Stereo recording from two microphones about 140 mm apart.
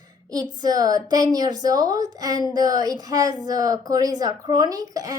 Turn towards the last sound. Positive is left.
turn(degrees=-25)  # may be behind; listen again after turning